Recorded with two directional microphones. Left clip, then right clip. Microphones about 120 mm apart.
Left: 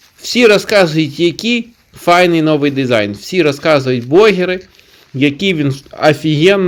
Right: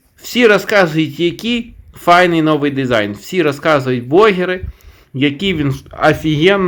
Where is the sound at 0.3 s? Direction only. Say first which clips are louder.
Left 1 dB; 40° left (ahead or behind).